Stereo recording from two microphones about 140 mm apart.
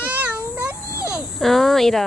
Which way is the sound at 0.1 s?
10° right (ahead or behind).